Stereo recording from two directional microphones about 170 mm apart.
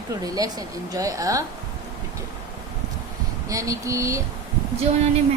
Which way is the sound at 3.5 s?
20° right (ahead or behind).